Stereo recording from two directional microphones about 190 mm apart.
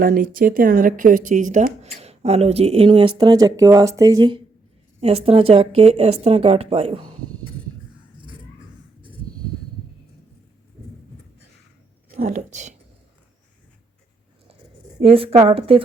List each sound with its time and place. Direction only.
0.0 s speech: 45° right (ahead or behind); by 4.4 s 20° right (ahead or behind)
4.9 s a woman's voice: 30° right (ahead or behind)
12.1 s a woman's voice: 40° right (ahead or behind)
14.9 s a woman's voice: 30° right (ahead or behind)